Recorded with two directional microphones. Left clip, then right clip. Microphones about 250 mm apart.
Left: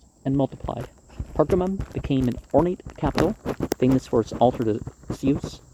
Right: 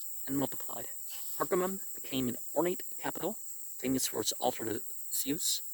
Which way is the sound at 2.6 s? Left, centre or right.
Right.